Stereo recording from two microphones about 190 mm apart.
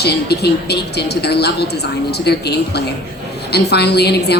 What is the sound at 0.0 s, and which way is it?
A woman's voice, 60° left (ahead or behind).